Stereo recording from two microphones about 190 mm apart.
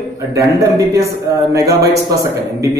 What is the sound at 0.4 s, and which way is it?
Speech, 15° right (ahead or behind).